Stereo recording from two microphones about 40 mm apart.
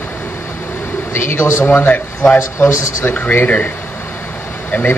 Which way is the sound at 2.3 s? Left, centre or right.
Left.